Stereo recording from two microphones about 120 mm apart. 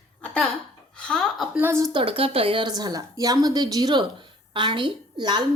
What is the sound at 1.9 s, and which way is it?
Speech, 50° right (ahead or behind).